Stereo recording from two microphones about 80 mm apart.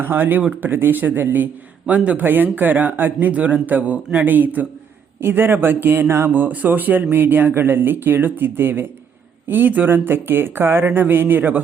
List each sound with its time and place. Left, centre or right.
0.0 s speech: right